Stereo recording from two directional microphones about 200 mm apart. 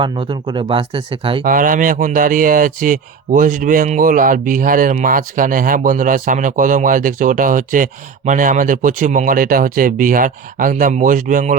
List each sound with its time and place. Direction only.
0.0 s speech: 25° right (ahead or behind)
1.5 s speech: 45° right (ahead or behind)